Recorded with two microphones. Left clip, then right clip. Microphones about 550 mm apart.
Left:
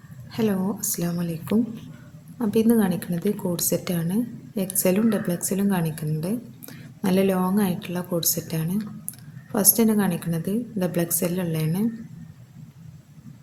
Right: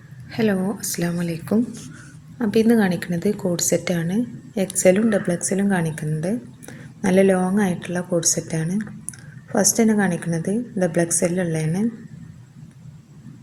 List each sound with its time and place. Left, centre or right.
0.3 s a woman's voice: left